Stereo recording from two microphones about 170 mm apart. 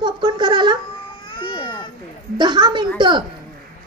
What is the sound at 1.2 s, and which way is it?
Baby cry, 30° left (ahead or behind).